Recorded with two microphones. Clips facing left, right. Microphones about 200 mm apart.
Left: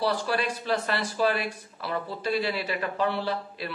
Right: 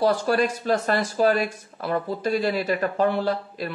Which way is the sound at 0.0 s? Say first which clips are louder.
Right 6 dB; 45° right (ahead or behind).